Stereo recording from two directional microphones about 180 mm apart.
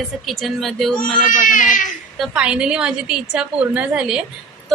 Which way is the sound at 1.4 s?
45° left (ahead or behind).